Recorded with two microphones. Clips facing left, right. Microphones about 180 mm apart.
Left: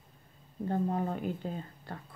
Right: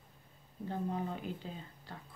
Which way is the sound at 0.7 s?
50° left (ahead or behind).